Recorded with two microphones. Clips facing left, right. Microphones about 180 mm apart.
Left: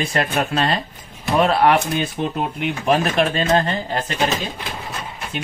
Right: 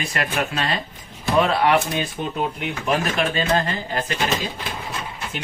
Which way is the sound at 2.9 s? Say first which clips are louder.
Left 4 dB; 30° left (ahead or behind).